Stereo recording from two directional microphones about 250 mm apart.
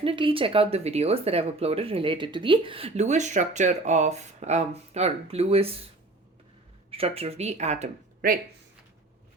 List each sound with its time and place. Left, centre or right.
0.0 s speech: right
6.9 s speech: right